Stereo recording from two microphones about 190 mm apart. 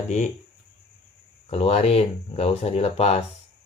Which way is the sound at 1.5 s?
30° left (ahead or behind).